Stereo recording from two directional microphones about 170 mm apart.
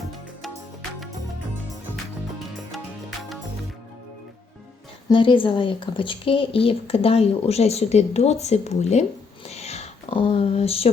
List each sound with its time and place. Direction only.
0.0 s music: centre (ahead or behind)
2.4 s music: centre (ahead or behind)
5.0 s speech: 30° left (ahead or behind)
9.5 s a sound: 40° left (ahead or behind)